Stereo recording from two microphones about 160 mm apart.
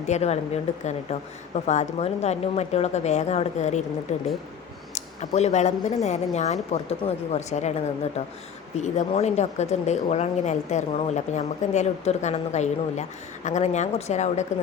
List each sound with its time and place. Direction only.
0.1 s speech: 40° left (ahead or behind)
8.8 s speech: 45° left (ahead or behind)